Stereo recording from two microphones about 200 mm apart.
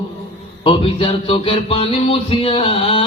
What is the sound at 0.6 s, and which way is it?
Speech, 25° left (ahead or behind).